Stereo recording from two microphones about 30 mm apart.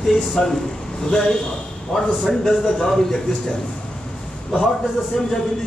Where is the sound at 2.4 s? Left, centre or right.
Centre.